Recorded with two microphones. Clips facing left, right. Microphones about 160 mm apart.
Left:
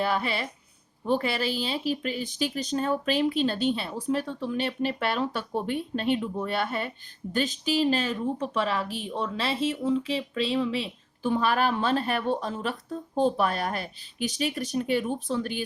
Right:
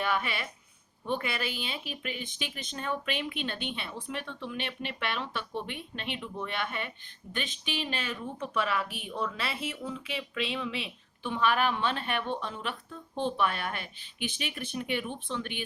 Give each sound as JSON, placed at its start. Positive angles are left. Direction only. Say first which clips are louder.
{"t": 0.0, "sound": "speech", "louder": "left 4 dB", "side_deg": 35}